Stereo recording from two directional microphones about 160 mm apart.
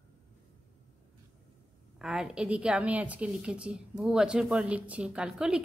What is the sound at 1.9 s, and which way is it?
A woman's voice, 5° right (ahead or behind).